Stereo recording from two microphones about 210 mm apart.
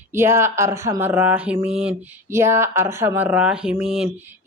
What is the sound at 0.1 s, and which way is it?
Speech, 10° right (ahead or behind).